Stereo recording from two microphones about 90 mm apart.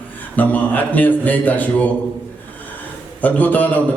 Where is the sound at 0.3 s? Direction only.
20° left (ahead or behind).